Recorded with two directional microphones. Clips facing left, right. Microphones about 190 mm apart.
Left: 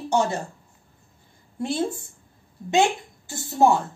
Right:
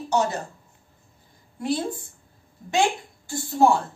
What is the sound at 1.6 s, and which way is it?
Speech, 25° left (ahead or behind).